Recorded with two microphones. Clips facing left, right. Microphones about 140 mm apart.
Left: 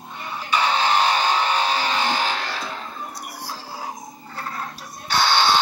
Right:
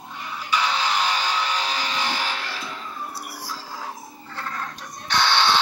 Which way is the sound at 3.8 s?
35° left (ahead or behind).